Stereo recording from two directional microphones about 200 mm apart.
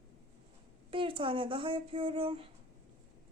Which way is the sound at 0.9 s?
25° right (ahead or behind).